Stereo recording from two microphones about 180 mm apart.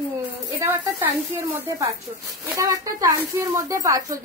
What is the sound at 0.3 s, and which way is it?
A woman's voice, 10° right (ahead or behind).